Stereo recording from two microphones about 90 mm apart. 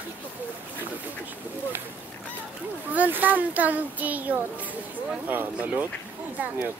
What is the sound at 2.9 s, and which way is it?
Speech, 20° right (ahead or behind).